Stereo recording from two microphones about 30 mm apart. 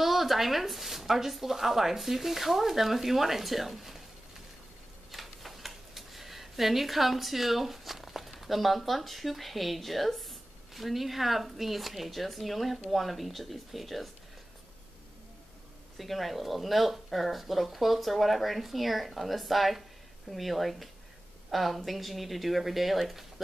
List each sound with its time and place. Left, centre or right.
0.0 s speech: centre
5.1 s a sound: centre
10.7 s speech: centre
16.0 s speech: centre